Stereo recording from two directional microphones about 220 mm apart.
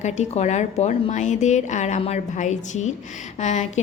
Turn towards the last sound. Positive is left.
turn(degrees=30)  # may be behind; listen again after turning